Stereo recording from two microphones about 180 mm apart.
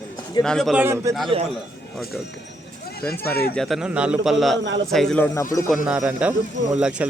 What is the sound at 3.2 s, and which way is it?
Speech, 60° left (ahead or behind).